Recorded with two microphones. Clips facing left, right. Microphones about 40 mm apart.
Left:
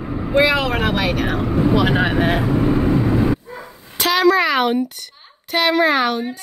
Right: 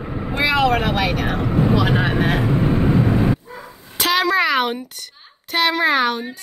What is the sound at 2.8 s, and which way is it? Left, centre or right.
Vehicle, centre.